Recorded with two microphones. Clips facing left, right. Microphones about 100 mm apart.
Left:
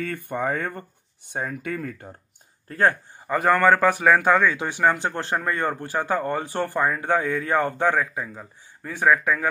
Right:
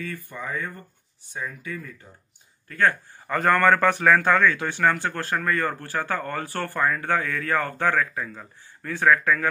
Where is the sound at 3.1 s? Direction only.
15° left (ahead or behind).